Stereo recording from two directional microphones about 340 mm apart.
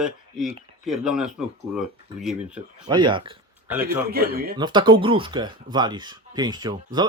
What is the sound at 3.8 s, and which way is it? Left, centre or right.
Speech, right.